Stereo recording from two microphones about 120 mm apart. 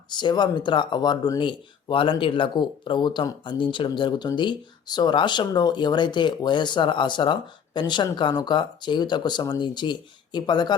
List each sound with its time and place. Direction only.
0.1 s speech: 40° left (ahead or behind)